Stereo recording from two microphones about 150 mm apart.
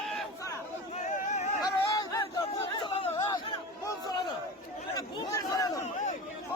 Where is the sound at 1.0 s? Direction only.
50° left (ahead or behind).